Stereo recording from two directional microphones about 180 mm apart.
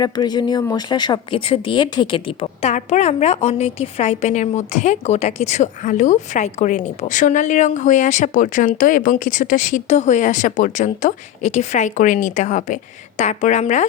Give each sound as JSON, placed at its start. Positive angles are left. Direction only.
{"t": 0.0, "sound": "speech", "side_deg": 25}